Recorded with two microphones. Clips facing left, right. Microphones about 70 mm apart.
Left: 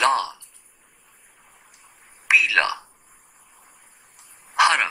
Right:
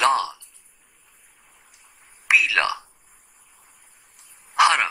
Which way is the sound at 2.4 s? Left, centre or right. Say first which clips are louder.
Left 1 dB; left.